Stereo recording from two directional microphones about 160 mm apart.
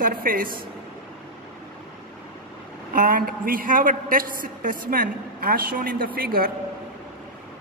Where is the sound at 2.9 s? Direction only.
60° right (ahead or behind).